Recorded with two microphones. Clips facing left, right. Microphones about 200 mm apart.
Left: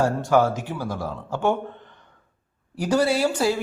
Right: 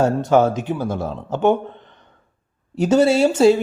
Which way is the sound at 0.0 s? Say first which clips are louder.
Right 4 dB; 25° right (ahead or behind).